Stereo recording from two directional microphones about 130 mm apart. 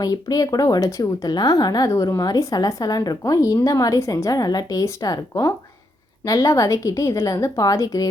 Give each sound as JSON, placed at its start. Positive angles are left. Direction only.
{"t": 0.0, "sound": "speech", "side_deg": 30}